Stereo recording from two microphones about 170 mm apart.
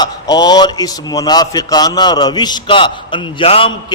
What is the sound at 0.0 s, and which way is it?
A man's voice, 25° left (ahead or behind).